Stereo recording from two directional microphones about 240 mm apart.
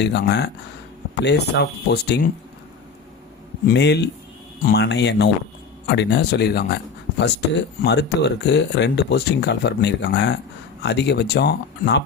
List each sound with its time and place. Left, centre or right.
0.0 s speech: left
3.7 s speech: left
7.8 s speech: left